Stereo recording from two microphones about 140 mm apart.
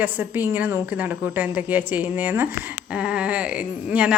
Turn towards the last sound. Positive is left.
turn(degrees=-10)  # may be behind; listen again after turning